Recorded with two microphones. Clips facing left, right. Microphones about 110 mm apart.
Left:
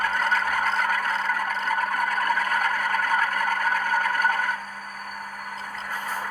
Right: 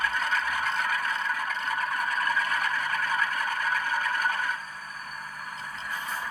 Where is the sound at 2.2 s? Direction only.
55° left (ahead or behind).